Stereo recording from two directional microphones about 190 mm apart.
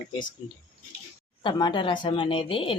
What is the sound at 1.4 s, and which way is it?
Speech, 25° left (ahead or behind).